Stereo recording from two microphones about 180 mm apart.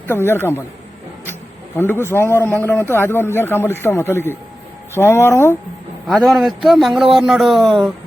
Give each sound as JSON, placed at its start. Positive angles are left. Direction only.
{"t": 0.1, "sound": "a man's voice", "side_deg": 15}
{"t": 6.1, "sound": "a man's voice", "side_deg": 0}